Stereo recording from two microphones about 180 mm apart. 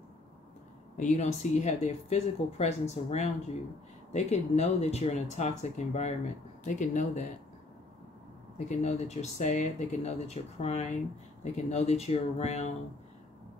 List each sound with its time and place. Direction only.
0.9 s speech: 40° left (ahead or behind)
8.6 s speech: 40° left (ahead or behind)